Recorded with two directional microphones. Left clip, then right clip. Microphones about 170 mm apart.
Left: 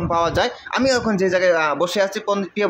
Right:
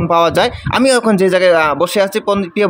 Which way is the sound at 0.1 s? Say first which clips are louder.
Right 7 dB; 40° right (ahead or behind).